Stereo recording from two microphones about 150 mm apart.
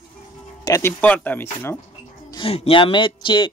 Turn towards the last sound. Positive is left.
turn(degrees=30)  # may be behind; listen again after turning